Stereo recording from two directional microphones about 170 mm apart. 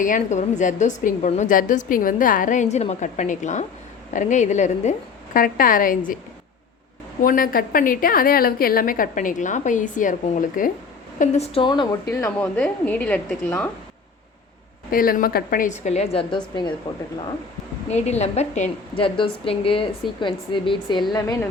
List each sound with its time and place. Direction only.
0.0 s a woman's voice: 45° left (ahead or behind)
7.2 s a woman's voice: 55° left (ahead or behind)
11.2 s a woman's voice: 35° left (ahead or behind); by 12.3 s 20° left (ahead or behind)
12.4 s a woman's voice: 10° left (ahead or behind)
14.8 s a woman's voice: 55° left (ahead or behind)
16.3 s a woman's voice: 25° left (ahead or behind)
17.9 s a woman's voice: 40° left (ahead or behind)
18.9 s a woman's voice: 30° left (ahead or behind)